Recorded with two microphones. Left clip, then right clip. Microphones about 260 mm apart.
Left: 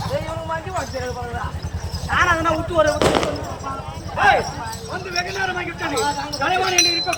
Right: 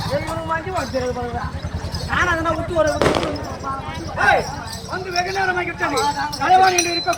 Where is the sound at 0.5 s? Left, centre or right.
Left.